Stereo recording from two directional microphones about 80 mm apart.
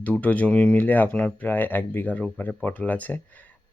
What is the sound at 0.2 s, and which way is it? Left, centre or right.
Speech, centre.